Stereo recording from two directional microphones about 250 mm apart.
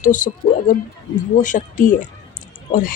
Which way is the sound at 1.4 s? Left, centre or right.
Left.